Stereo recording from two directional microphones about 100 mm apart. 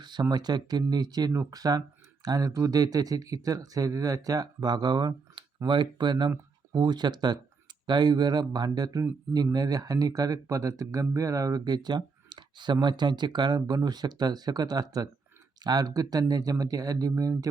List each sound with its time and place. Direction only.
0.0 s speech: 45° right (ahead or behind)